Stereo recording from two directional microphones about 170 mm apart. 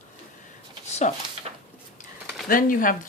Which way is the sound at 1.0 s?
45° left (ahead or behind).